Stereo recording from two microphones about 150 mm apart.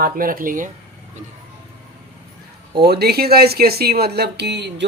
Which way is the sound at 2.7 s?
90° right.